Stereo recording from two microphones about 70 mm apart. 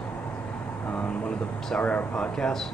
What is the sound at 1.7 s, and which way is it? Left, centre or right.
Speech, centre.